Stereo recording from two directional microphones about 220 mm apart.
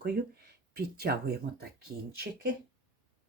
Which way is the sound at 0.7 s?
45° right (ahead or behind).